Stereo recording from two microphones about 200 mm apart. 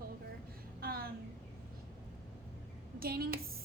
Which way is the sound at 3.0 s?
50° right (ahead or behind).